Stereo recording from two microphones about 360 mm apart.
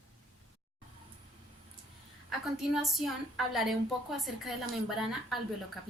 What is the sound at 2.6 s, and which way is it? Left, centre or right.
Speech, centre.